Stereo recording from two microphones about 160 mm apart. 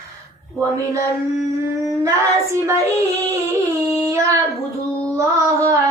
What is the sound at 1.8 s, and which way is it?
Child singing, 20° right (ahead or behind).